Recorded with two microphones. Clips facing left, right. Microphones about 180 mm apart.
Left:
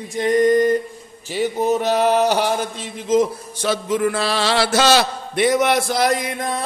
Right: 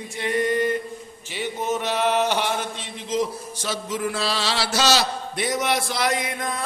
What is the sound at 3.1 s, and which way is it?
Mantra, 55° left (ahead or behind).